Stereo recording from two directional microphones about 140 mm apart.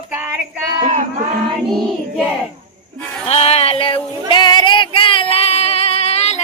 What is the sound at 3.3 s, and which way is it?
Female singing, 50° left (ahead or behind).